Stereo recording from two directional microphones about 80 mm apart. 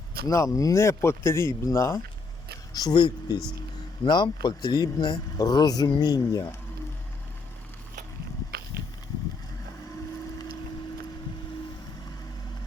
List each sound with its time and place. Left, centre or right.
0.3 s speech: left
2.7 s speech: left